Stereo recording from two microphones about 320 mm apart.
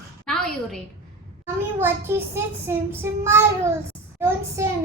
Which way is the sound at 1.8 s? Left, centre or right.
Centre.